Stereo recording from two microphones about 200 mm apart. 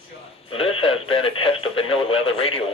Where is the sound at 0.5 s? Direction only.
25° left (ahead or behind).